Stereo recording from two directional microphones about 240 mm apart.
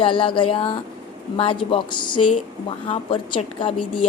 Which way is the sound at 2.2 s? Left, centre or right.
Left.